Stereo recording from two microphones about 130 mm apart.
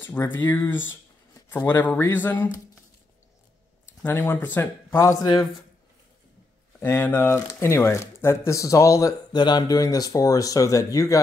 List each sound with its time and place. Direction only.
0.0 s speech: 15° left (ahead or behind)
4.0 s speech: 20° left (ahead or behind)
6.8 s speech: 15° left (ahead or behind)